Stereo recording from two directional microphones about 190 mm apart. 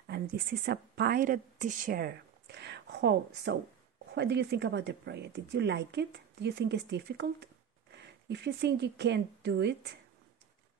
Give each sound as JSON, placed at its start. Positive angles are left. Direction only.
{"t": 0.1, "sound": "a woman's voice", "side_deg": -60}